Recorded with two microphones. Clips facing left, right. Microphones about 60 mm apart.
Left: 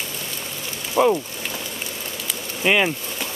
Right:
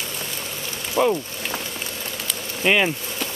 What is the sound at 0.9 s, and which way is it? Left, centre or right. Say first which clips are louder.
Speech: left 2 dB; centre.